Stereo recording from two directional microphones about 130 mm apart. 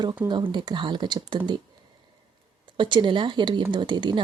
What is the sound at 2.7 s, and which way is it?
Speech, 40° right (ahead or behind).